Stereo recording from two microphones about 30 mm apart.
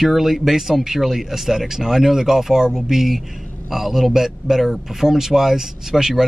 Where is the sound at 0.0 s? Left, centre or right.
Centre.